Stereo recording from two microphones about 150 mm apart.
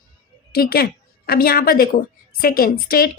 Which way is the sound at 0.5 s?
90° left.